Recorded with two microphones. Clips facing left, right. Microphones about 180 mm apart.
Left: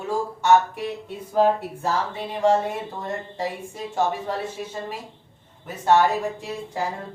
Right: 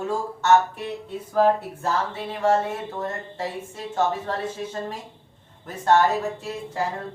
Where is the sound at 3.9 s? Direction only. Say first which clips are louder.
Even; 10° left (ahead or behind).